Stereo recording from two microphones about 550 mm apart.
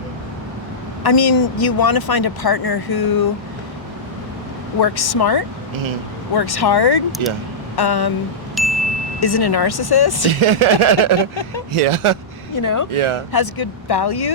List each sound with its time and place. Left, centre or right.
1.0 s speech: left
4.8 s speech: left
7.2 s a sound: right
7.8 s speech: left
8.6 s chime: centre
9.2 s speech: left
10.4 s a sound: right
11.2 s speech: left
11.7 s a sound: right
12.5 s speech: left
13.0 s a sound: right
13.3 s speech: left